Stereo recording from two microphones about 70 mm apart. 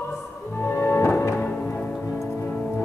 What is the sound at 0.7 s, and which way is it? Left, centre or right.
Music, left.